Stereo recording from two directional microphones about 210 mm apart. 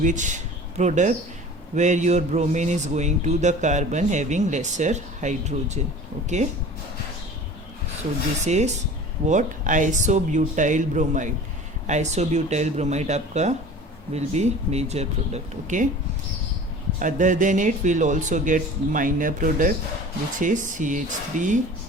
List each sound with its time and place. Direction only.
0.0 s a man's voice: 35° right (ahead or behind)
8.4 s a man's voice: 35° right (ahead or behind)
17.0 s a man's voice: 35° right (ahead or behind)